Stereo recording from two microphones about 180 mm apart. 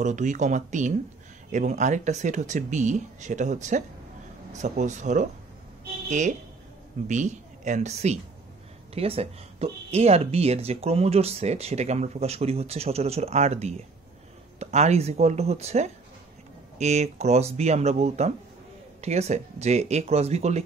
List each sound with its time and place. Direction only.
0.0 s speech: 40° right (ahead or behind)